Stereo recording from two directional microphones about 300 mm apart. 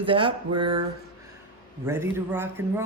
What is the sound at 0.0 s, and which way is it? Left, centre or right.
Speech, centre.